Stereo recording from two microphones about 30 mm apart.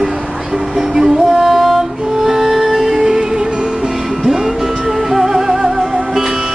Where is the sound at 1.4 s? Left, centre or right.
Centre.